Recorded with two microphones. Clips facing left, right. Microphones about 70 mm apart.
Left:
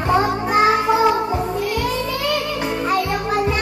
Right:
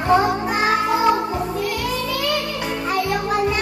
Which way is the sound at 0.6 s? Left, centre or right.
Centre.